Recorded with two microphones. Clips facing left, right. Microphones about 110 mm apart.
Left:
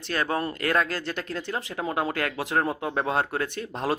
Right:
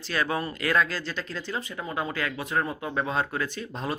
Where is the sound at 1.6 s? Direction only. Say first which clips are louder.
Left 4 dB; 85° left.